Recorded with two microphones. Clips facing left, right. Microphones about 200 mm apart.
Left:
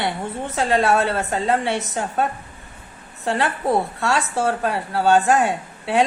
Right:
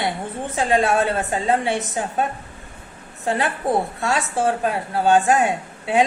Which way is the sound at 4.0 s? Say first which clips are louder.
Even; 20° right (ahead or behind).